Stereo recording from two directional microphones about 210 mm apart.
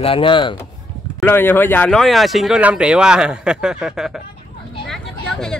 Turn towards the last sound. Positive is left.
turn(degrees=0)  # may be behind; listen again after turning